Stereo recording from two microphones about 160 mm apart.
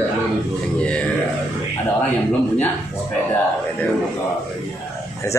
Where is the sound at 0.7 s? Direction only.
5° left (ahead or behind).